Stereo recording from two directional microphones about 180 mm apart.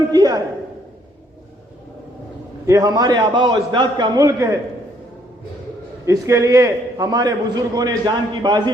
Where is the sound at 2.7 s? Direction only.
20° right (ahead or behind).